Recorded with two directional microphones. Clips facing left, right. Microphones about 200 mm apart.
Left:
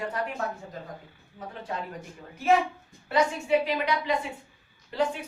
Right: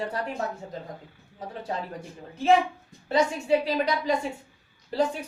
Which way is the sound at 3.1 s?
35° right (ahead or behind).